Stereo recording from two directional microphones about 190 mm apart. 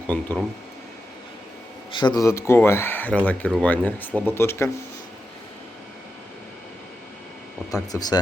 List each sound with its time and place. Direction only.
0.1 s speech: 10° left (ahead or behind)
1.9 s speech: 25° left (ahead or behind)
7.7 s speech: 20° left (ahead or behind)